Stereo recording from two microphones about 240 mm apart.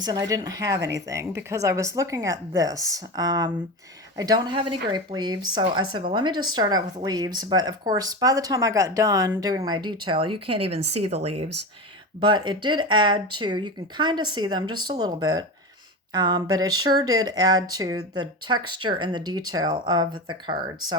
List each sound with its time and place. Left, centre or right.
0.0 s speech: centre
12.2 s speech: centre